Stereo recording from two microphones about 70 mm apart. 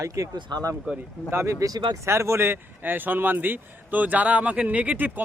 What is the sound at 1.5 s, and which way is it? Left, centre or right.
Speech, right.